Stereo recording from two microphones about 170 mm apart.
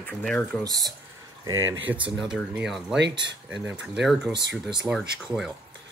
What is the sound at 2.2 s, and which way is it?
Speech, 5° right (ahead or behind).